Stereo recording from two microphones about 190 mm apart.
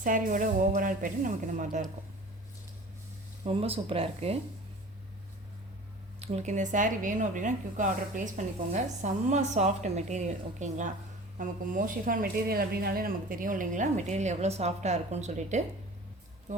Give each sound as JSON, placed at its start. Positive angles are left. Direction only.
{"t": 0.0, "sound": "speech", "side_deg": -45}
{"t": 3.4, "sound": "speech", "side_deg": -30}
{"t": 6.1, "sound": "speech", "side_deg": -35}